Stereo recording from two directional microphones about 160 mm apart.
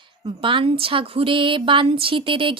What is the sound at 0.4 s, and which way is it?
A woman's voice, 35° right (ahead or behind).